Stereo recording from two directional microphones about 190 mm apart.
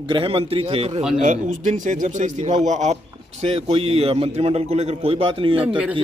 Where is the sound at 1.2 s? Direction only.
45° right (ahead or behind).